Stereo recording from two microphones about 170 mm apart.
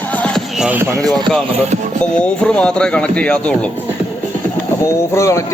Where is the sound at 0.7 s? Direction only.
15° right (ahead or behind).